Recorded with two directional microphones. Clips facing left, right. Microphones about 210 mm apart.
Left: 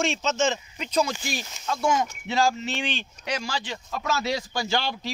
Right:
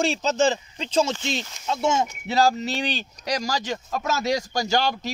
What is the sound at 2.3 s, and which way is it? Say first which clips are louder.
Speech: right 3 dB; 40° right (ahead or behind).